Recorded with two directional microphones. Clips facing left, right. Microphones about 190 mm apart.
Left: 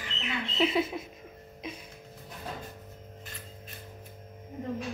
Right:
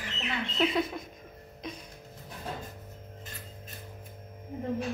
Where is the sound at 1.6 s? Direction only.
5° left (ahead or behind).